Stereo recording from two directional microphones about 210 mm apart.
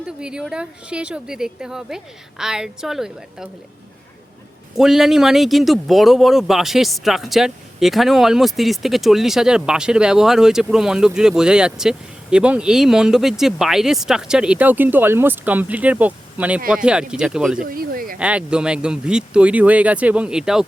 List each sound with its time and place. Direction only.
0.2 s speech: 5° right (ahead or behind)
4.8 s speech: centre (ahead or behind)
17.6 s speech: 45° right (ahead or behind)
18.2 s speech: 5° right (ahead or behind)